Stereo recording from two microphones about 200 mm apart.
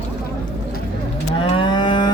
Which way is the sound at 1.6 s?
25° left (ahead or behind).